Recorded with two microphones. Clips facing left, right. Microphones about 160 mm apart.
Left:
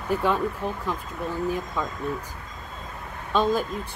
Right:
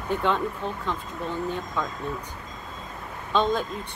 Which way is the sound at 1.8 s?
5° left (ahead or behind).